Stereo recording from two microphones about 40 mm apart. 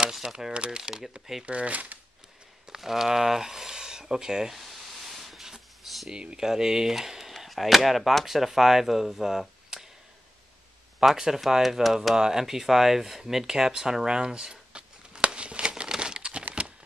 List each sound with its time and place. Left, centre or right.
0.2 s speech: centre
1.4 s speech: right
2.7 s speech: centre
4.6 s a sound: centre
6.0 s speech: centre
11.0 s speech: centre; by 15.7 s right
15.9 s crumpling: right